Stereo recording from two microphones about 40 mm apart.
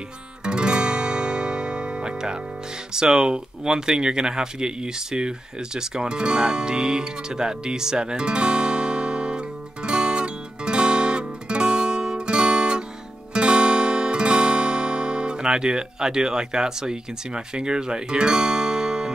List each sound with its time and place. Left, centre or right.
0.4 s music: right
2.9 s speech: centre
9.8 s music: right